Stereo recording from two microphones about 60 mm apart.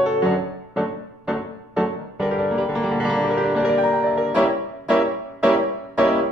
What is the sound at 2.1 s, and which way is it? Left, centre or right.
Music, centre.